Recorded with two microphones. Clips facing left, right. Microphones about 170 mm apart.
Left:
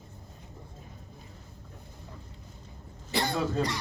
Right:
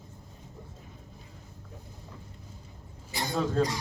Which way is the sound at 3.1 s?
65° left (ahead or behind).